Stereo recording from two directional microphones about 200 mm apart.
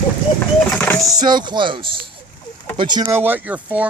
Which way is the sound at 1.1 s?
20° right (ahead or behind).